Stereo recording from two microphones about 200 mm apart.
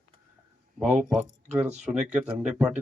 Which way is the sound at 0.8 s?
Centre (ahead or behind).